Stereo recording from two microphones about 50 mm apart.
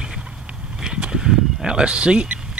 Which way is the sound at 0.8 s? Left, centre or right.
Centre.